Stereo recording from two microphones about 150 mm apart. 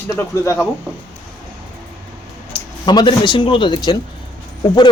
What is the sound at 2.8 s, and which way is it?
Speech, 30° left (ahead or behind).